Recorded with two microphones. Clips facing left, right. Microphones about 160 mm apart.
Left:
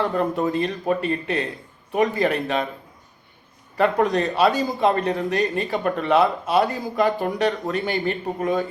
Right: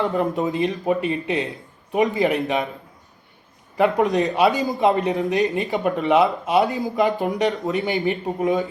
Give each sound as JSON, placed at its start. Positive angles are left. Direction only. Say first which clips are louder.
{"t": 0.0, "sound": "speech", "louder": "even", "side_deg": -20}
{"t": 3.8, "sound": "speech", "louder": "right 1 dB", "side_deg": -15}